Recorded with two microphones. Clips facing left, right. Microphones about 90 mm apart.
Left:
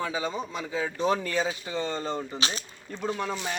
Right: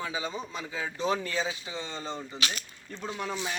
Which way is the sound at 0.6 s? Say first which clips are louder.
Left 5 dB; 25° left (ahead or behind).